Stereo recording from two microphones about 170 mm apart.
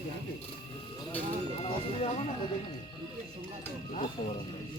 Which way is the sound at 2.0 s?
40° left (ahead or behind).